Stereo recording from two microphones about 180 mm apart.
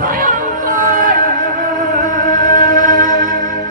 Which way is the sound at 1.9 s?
45° right (ahead or behind).